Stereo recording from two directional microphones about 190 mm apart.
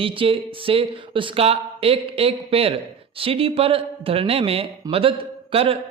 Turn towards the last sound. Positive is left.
turn(degrees=-30)  # may be behind; listen again after turning